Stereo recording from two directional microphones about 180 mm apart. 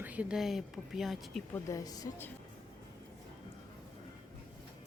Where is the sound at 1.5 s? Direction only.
20° left (ahead or behind).